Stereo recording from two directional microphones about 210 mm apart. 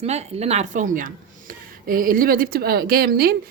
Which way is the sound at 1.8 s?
40° right (ahead or behind).